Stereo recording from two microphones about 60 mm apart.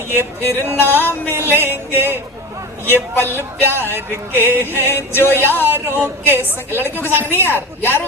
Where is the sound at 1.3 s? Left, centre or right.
Right.